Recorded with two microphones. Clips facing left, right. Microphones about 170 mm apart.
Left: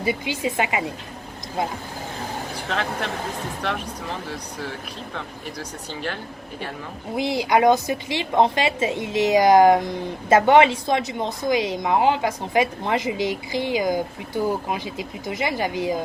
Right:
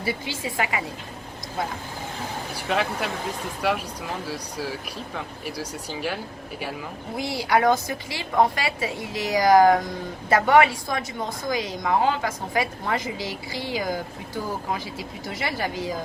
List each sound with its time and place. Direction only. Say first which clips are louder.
0.0 s a woman's voice: left 5 dB; 20° left (ahead or behind)
2.6 s speech: right 2 dB; 5° right (ahead or behind)
7.2 s a woman's voice: left 3 dB; 20° left (ahead or behind)